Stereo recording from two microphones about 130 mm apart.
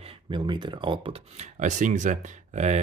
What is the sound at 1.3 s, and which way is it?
Speech, 75° right (ahead or behind).